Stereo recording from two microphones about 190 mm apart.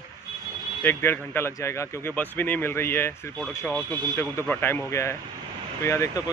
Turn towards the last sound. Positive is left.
turn(degrees=15)  # may be behind; listen again after turning